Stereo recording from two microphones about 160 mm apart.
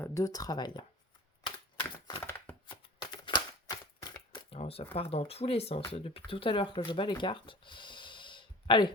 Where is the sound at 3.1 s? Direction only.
30° left (ahead or behind).